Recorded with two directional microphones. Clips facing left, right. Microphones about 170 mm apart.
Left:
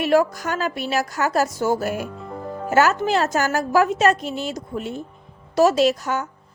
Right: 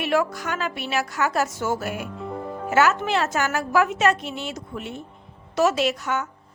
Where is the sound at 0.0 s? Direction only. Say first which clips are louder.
Left 5 dB; 40° left (ahead or behind).